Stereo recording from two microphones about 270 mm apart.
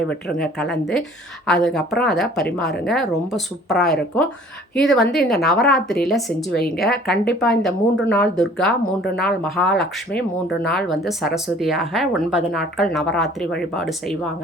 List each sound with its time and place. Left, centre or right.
0.1 s speech: centre
6.8 s speech: left
7.6 s speech: centre